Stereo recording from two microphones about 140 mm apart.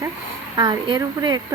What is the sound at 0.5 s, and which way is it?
Speech, 30° right (ahead or behind).